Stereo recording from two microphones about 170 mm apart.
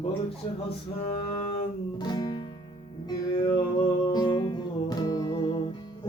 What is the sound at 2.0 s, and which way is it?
Music, 25° left (ahead or behind).